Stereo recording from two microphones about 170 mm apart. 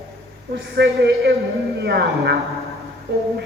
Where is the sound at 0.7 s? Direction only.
70° right (ahead or behind).